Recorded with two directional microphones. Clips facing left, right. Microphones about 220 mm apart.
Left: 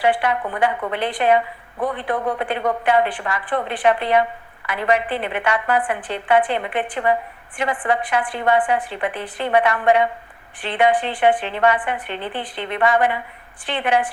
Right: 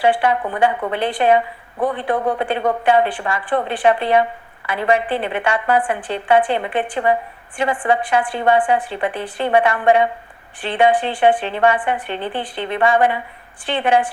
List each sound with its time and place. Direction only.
0.0 s a woman's voice: 30° right (ahead or behind)